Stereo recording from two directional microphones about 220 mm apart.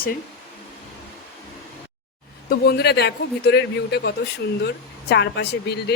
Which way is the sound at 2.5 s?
45° left (ahead or behind).